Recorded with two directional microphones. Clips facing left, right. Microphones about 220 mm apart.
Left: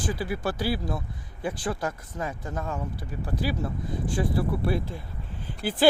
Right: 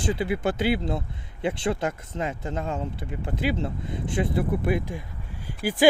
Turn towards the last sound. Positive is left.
turn(degrees=-10)  # may be behind; listen again after turning